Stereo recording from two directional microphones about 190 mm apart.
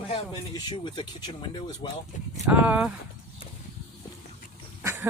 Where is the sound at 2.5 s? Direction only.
10° right (ahead or behind).